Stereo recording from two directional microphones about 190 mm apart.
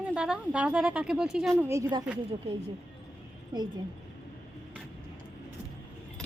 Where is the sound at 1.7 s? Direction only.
20° right (ahead or behind).